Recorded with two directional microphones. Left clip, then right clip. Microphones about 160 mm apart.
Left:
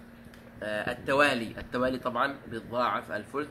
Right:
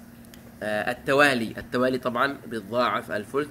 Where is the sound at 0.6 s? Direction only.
15° right (ahead or behind).